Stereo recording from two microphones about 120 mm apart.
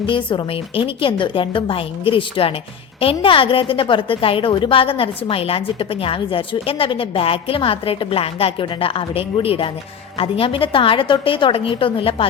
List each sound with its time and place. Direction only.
0.0 s a woman's voice: 45° left (ahead or behind)